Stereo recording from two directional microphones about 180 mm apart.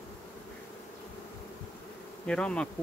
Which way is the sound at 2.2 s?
5° left (ahead or behind).